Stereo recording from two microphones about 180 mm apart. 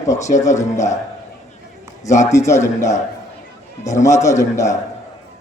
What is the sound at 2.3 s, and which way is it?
Speech, 15° left (ahead or behind).